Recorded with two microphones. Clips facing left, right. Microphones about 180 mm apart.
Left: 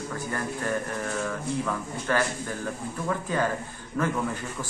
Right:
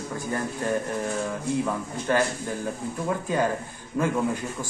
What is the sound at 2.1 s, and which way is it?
Speech, 20° right (ahead or behind).